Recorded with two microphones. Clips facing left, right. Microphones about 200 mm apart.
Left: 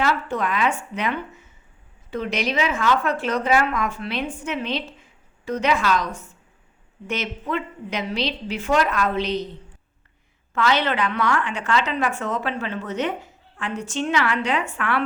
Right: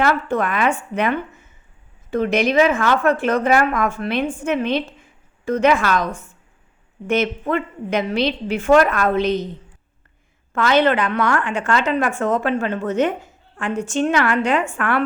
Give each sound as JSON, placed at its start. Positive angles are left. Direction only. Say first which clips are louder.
{"t": 0.0, "sound": "a woman's voice", "louder": "right 4 dB", "side_deg": -55}
{"t": 10.5, "sound": "a woman's voice", "louder": "right 5 dB", "side_deg": -50}